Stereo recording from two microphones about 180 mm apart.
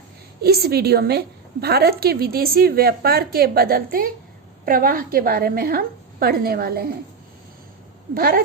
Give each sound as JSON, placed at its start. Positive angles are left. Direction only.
{"t": 0.4, "sound": "a woman's voice", "side_deg": -60}
{"t": 8.1, "sound": "speech", "side_deg": -55}